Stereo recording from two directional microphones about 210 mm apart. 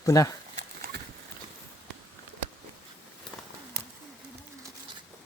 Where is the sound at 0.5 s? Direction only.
45° right (ahead or behind).